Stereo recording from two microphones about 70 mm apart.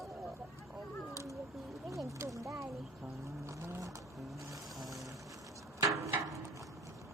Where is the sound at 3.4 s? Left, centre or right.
Right.